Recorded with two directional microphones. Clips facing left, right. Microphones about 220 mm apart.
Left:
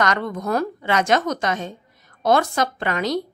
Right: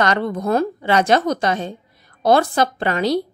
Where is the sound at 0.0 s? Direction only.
30° right (ahead or behind).